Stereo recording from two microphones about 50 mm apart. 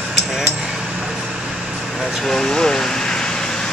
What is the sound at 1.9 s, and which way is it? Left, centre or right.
Vehicle, centre.